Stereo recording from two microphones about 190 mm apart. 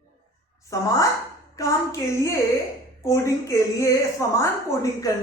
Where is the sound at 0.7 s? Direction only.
15° left (ahead or behind).